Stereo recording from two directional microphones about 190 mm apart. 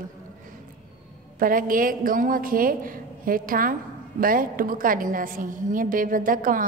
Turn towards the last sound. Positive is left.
turn(degrees=-45)  # may be behind; listen again after turning